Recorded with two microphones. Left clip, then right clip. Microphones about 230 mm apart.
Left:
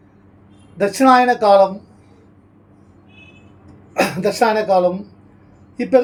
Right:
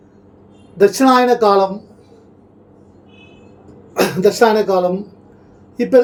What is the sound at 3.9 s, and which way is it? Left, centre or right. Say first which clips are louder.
Speech: right 4 dB; centre.